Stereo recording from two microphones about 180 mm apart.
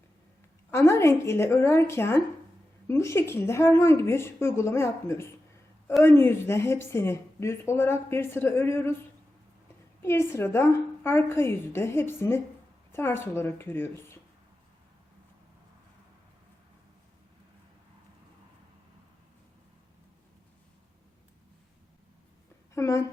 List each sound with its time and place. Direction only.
0.7 s a woman's voice: 15° left (ahead or behind)
10.0 s a woman's voice: 15° left (ahead or behind)
22.7 s a woman's voice: 15° left (ahead or behind)